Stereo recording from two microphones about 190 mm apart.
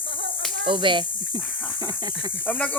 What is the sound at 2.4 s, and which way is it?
Speech, 10° left (ahead or behind).